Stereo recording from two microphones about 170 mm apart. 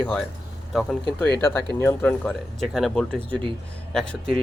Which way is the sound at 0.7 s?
Centre (ahead or behind).